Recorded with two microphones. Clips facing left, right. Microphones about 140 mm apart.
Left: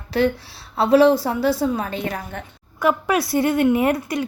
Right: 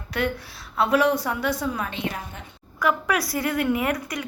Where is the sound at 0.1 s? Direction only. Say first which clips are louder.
Left 7 dB; 30° left (ahead or behind).